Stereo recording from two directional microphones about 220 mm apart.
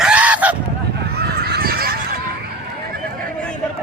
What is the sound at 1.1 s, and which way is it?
Honk, 45° right (ahead or behind).